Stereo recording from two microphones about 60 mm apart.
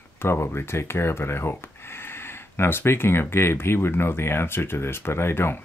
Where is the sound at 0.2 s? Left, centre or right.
Left.